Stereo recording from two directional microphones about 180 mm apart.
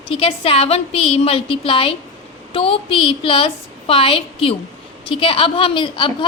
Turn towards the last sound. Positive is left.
turn(degrees=30)  # may be behind; listen again after turning